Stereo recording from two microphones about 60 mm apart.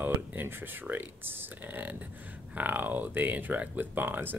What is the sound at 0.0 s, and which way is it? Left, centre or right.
Speech, right.